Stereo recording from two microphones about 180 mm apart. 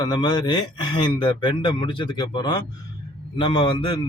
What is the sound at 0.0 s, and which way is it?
A man's voice, 25° left (ahead or behind).